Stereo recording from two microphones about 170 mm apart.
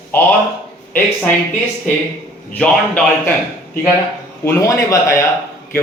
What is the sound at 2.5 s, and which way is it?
Speech, 10° left (ahead or behind).